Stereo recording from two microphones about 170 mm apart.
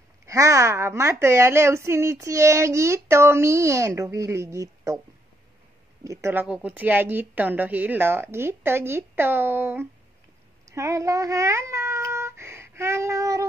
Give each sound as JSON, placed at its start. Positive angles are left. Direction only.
{"t": 0.3, "sound": "a woman's voice", "side_deg": -20}
{"t": 6.0, "sound": "a woman's voice", "side_deg": -15}